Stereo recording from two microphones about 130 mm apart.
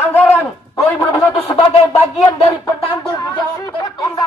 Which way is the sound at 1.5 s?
50° left (ahead or behind).